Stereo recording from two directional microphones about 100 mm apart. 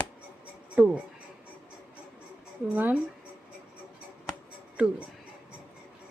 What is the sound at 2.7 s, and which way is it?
Speech, 15° right (ahead or behind).